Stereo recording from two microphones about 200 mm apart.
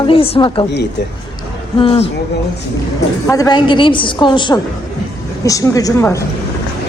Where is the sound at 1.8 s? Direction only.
25° left (ahead or behind).